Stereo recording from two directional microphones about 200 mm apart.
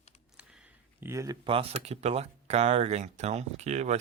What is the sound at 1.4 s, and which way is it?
Speech, 30° right (ahead or behind).